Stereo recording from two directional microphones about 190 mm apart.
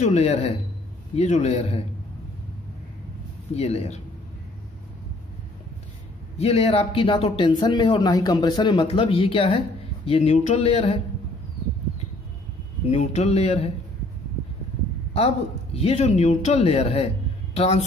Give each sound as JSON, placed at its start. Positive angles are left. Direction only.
{"t": 0.0, "sound": "speech", "side_deg": 35}
{"t": 3.5, "sound": "speech", "side_deg": 35}
{"t": 6.3, "sound": "speech", "side_deg": 35}
{"t": 12.9, "sound": "speech", "side_deg": 35}
{"t": 15.1, "sound": "speech", "side_deg": 30}